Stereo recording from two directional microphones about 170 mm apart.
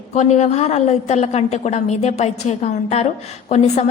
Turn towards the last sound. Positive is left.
turn(degrees=40)  # may be behind; listen again after turning